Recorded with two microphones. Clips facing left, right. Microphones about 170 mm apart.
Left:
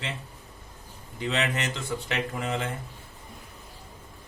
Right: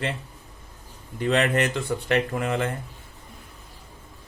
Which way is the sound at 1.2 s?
55° right (ahead or behind).